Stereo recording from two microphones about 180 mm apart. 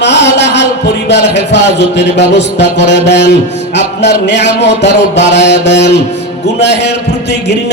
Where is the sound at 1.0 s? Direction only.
75° left (ahead or behind).